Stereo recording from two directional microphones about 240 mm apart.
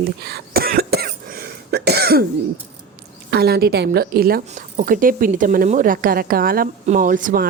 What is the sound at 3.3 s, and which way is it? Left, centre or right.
A woman's voice, right.